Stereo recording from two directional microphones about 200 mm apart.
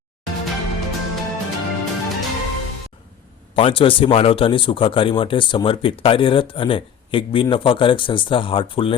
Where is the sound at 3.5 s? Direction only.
25° left (ahead or behind).